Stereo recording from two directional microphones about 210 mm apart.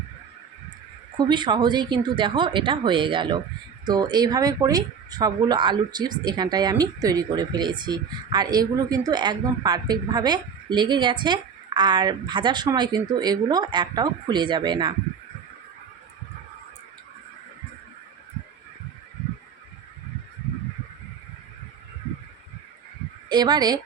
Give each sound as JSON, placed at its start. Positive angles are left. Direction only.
{"t": 1.2, "sound": "speech", "side_deg": -20}
{"t": 23.3, "sound": "speech", "side_deg": -20}